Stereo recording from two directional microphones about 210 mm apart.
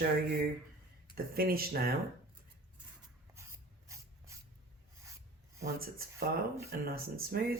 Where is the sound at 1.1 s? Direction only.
45° right (ahead or behind).